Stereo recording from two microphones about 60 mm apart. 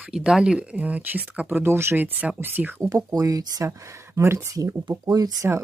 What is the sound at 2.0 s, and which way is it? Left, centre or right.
Speech, right.